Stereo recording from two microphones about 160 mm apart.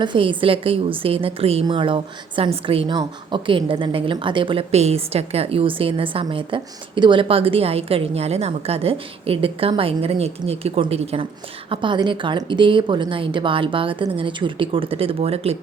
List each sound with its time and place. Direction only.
0.0 s a woman's voice: 30° right (ahead or behind)